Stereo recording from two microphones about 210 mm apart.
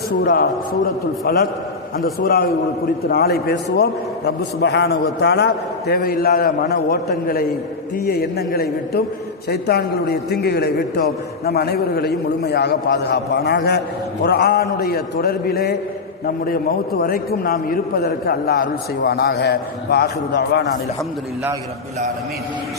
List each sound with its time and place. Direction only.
0.1 s a man's voice: 40° left (ahead or behind)
17.0 s a man's voice: 45° left (ahead or behind)